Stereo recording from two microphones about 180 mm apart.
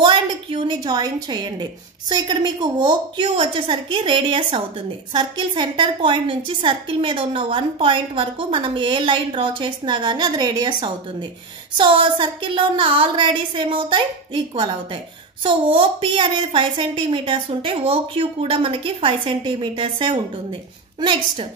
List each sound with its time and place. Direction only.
0.0 s a woman's voice: 25° right (ahead or behind)